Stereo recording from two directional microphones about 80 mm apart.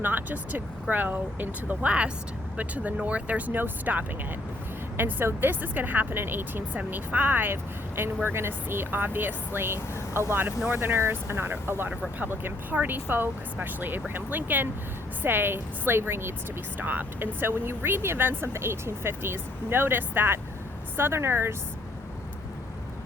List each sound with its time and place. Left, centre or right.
0.0 s speech: right